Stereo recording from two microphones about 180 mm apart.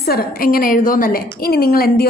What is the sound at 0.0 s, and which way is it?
A woman's voice, 55° left (ahead or behind).